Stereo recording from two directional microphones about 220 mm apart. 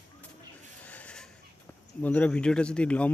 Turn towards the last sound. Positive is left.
turn(degrees=5)  # may be behind; listen again after turning